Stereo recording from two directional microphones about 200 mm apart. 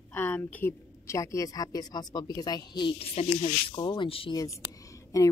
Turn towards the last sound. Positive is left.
turn(degrees=15)  # may be behind; listen again after turning